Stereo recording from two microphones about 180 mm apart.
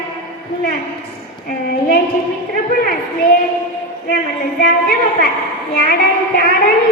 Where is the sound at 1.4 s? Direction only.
55° left (ahead or behind).